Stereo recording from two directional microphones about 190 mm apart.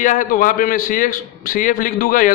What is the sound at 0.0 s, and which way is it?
A man's voice, 45° left (ahead or behind).